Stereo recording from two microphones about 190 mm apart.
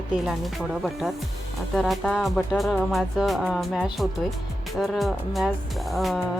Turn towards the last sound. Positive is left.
turn(degrees=0)  # may be behind; listen again after turning